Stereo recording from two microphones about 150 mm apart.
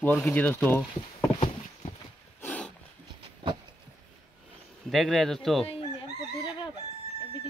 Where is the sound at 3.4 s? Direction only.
35° right (ahead or behind).